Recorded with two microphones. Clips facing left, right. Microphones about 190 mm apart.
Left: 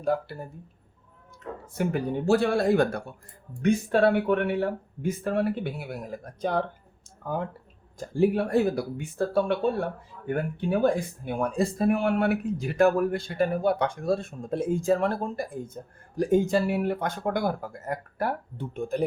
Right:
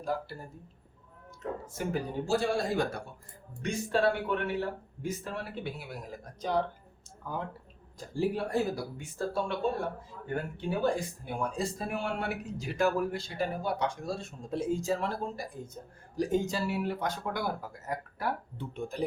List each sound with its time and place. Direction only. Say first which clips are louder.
1.6 s speech: left 8 dB; 60° left (ahead or behind)
7.2 s speech: left 6 dB; 55° left (ahead or behind)